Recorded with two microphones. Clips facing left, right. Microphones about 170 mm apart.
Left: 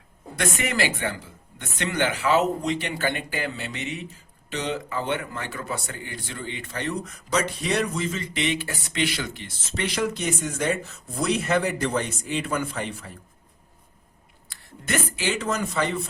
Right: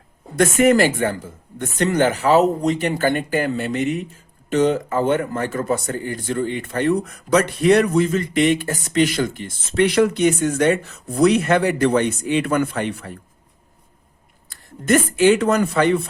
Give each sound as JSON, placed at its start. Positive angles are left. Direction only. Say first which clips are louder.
{"t": 0.3, "sound": "a man's voice", "louder": "right 12 dB", "side_deg": -45}
{"t": 14.5, "sound": "a man's voice", "louder": "right 11 dB", "side_deg": -50}